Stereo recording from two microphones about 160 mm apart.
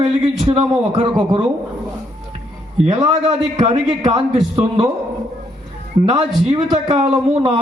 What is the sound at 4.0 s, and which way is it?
Speech, 25° right (ahead or behind).